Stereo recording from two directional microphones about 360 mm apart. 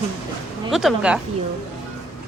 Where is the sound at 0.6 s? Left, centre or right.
Centre.